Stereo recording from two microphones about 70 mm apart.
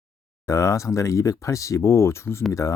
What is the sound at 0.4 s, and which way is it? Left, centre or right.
Speech, left.